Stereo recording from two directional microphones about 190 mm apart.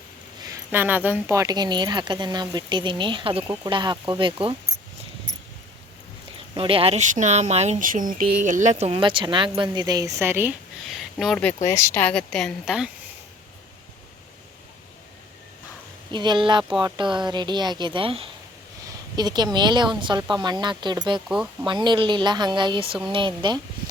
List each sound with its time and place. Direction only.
0.4 s speech: 15° right (ahead or behind)
6.6 s speech: 30° right (ahead or behind); by 10.5 s 10° right (ahead or behind)
10.8 s speech: centre (ahead or behind)
11.7 s a woman's voice: 15° left (ahead or behind); by 12.9 s 5° right (ahead or behind)
16.1 s speech: 25° right (ahead or behind)
21.2 s a woman's voice: 5° right (ahead or behind)
21.7 s speech: 25° right (ahead or behind)